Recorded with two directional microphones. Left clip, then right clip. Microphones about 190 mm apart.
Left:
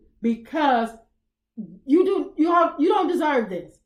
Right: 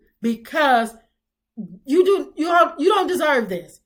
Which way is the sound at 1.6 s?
Centre (ahead or behind).